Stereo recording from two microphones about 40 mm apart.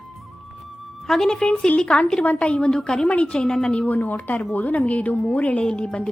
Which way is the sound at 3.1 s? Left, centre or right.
Left.